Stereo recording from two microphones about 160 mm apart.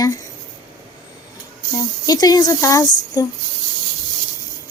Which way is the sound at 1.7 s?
25° left (ahead or behind).